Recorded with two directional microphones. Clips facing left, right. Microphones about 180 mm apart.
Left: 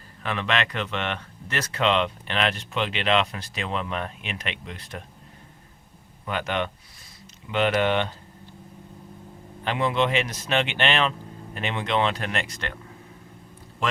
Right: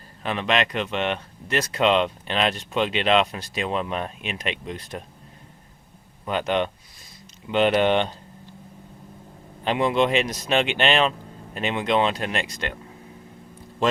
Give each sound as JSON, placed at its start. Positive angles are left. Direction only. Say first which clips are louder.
{"t": 0.2, "sound": "speech", "louder": "right 3 dB", "side_deg": -20}
{"t": 6.2, "sound": "speech", "louder": "right 4 dB", "side_deg": -20}
{"t": 9.6, "sound": "speech", "louder": "right 3 dB", "side_deg": -20}